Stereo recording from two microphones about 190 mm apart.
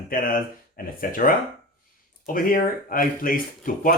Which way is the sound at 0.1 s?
50° left (ahead or behind).